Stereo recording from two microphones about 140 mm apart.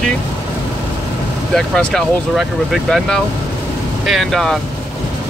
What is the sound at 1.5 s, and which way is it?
Speech, 5° left (ahead or behind).